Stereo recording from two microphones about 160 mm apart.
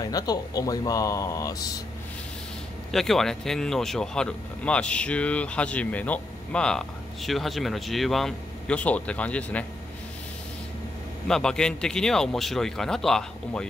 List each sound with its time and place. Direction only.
0.0 s speech: 25° left (ahead or behind)
2.9 s speech: centre (ahead or behind)
11.2 s speech: 5° left (ahead or behind)